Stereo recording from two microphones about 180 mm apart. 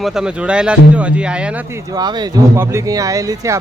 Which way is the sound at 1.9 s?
20° right (ahead or behind).